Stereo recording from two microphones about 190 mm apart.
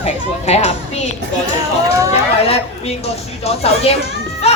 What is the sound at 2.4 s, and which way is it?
Speech, 30° left (ahead or behind).